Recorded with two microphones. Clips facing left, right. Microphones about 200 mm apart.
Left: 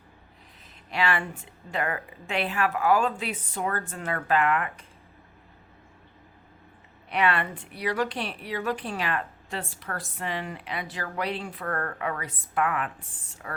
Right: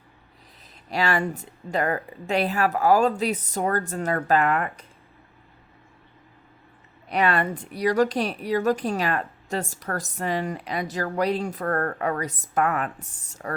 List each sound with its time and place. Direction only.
0.9 s a woman's voice: 40° right (ahead or behind)
7.1 s a woman's voice: 40° right (ahead or behind)